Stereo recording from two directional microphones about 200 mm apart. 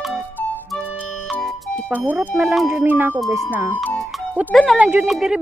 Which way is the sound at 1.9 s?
10° right (ahead or behind).